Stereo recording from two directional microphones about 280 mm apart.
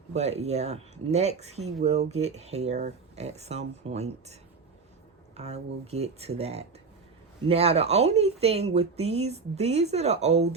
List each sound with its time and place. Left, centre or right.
0.1 s speech: right
5.4 s speech: right